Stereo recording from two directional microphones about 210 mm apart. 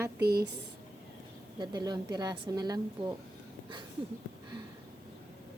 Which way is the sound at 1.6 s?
20° right (ahead or behind).